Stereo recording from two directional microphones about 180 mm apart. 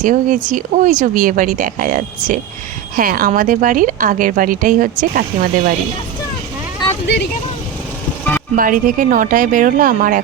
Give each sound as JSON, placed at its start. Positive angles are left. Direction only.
{"t": 0.0, "sound": "a woman's voice", "side_deg": -45}
{"t": 7.1, "sound": "speech", "side_deg": 85}
{"t": 8.5, "sound": "a woman's voice", "side_deg": -50}